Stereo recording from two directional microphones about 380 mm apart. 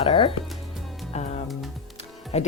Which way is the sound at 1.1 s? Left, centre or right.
Centre.